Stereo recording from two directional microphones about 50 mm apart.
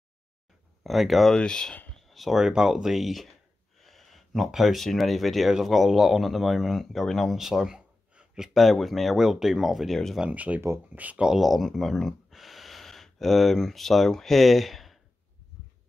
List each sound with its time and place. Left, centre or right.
0.8 s speech: centre
1.3 s speech: centre
2.0 s speech: centre
3.7 s a sound: centre
4.6 s speech: centre
7.3 s speech: centre
8.5 s speech: centre
10.3 s speech: right
11.3 s speech: centre